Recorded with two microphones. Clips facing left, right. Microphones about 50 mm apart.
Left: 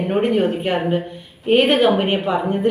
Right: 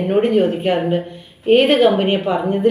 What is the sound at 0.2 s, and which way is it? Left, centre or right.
Speech, left.